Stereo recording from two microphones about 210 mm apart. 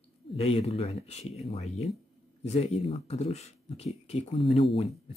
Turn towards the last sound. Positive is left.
turn(degrees=30)  # may be behind; listen again after turning